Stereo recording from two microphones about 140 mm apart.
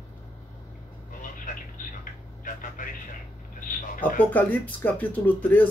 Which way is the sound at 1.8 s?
70° left (ahead or behind).